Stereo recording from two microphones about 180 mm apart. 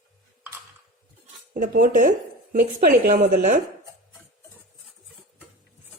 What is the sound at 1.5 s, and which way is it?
Speech, 50° right (ahead or behind).